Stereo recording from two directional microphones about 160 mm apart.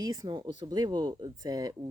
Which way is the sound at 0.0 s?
25° right (ahead or behind).